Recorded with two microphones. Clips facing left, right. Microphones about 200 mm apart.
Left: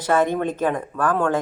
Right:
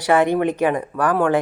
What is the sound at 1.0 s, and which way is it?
Speech, 15° right (ahead or behind).